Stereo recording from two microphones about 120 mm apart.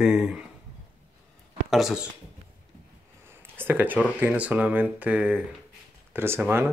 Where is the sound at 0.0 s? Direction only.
5° right (ahead or behind).